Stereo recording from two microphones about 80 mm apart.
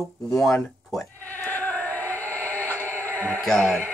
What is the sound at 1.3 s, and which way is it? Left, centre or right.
Synthetic singing, left.